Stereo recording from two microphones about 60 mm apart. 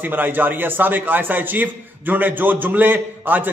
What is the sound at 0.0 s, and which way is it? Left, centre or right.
A man's voice, right.